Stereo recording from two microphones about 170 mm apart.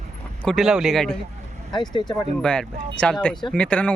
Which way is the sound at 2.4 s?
5° left (ahead or behind).